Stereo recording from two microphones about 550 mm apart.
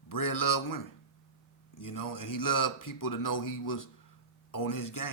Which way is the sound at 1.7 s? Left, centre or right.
Left.